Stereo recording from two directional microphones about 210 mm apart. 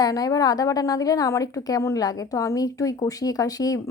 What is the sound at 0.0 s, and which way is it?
A woman's voice, 20° left (ahead or behind).